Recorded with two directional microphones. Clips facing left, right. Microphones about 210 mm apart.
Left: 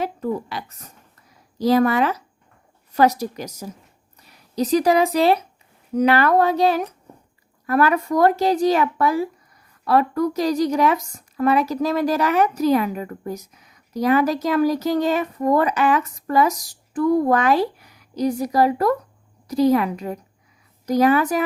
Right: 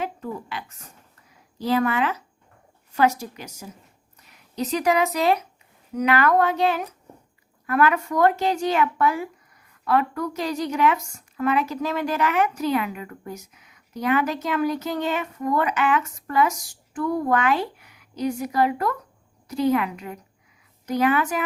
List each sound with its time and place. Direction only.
0.0 s a woman's voice: 40° left (ahead or behind)